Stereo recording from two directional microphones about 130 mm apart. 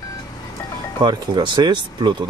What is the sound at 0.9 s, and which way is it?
Speech, 40° right (ahead or behind).